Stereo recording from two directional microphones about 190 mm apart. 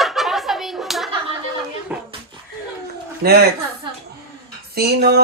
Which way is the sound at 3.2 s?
55° right (ahead or behind).